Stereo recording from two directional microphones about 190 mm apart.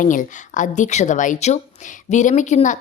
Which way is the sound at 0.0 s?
45° left (ahead or behind).